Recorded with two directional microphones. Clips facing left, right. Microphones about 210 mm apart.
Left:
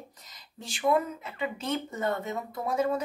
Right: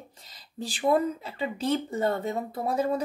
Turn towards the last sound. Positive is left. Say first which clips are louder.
# right 1 dB
turn(degrees=-35)  # may be behind; listen again after turning